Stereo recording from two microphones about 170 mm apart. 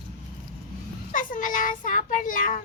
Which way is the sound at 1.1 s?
50° left (ahead or behind).